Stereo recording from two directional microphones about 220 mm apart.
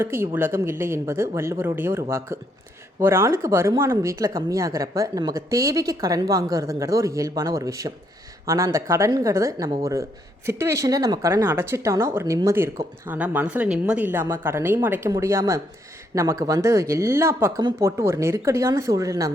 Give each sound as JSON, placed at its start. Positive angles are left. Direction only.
{"t": 0.0, "sound": "speech", "side_deg": -10}